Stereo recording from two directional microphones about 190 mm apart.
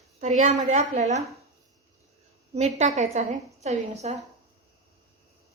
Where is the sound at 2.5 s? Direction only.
40° right (ahead or behind).